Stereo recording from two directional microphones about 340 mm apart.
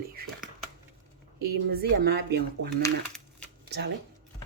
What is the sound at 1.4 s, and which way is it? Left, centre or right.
Speech, right.